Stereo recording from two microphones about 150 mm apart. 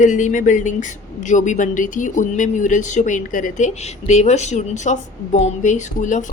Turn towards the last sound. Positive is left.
turn(degrees=55)  # may be behind; listen again after turning